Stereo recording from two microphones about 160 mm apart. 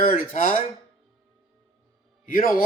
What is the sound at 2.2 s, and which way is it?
Speech, 60° left (ahead or behind).